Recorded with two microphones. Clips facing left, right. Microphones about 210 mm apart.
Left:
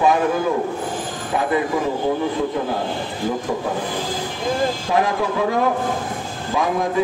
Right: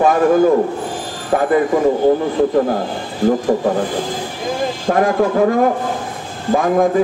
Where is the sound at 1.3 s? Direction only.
50° right (ahead or behind).